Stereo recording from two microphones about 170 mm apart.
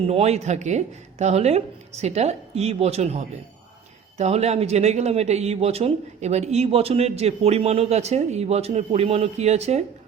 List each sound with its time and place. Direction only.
0.0 s speech: 35° right (ahead or behind)